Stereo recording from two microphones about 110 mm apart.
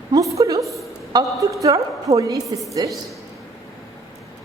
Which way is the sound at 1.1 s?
30° right (ahead or behind).